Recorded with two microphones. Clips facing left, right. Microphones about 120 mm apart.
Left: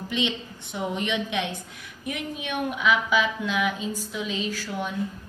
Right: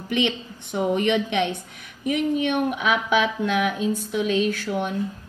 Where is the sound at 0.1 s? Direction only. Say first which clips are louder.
Right 5 dB; 55° right (ahead or behind).